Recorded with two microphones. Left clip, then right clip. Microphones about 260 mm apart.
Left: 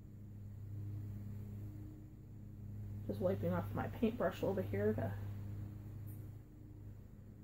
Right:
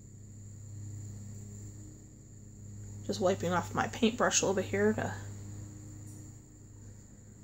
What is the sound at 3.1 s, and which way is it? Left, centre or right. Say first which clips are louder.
Speech: right 8 dB; right.